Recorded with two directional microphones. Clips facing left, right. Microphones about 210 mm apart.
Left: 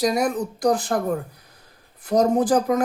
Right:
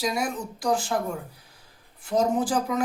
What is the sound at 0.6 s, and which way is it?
Speech, 55° left (ahead or behind).